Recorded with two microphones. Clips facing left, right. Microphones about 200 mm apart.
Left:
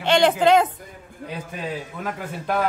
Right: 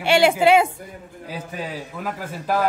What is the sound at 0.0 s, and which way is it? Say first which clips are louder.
Speech: right 1 dB; 10° right (ahead or behind).